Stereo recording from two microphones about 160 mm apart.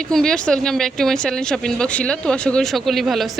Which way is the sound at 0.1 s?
5° left (ahead or behind).